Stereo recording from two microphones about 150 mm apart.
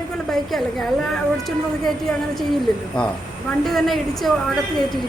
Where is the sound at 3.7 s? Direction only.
Centre (ahead or behind).